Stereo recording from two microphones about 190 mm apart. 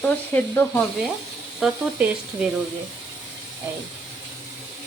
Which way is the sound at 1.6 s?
5° right (ahead or behind).